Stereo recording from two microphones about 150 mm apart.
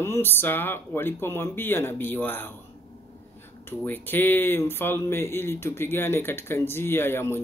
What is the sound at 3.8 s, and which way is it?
Speech, 15° left (ahead or behind).